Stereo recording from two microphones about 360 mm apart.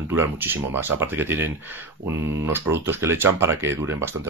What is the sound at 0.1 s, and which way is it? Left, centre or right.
Speech, centre.